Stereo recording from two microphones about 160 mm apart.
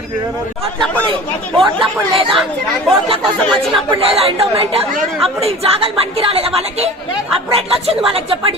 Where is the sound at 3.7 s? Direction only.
35° right (ahead or behind).